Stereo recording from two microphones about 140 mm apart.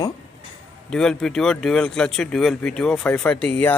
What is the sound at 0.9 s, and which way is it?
Speech, 5° left (ahead or behind).